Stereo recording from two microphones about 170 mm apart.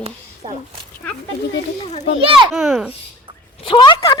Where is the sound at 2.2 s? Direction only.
35° right (ahead or behind).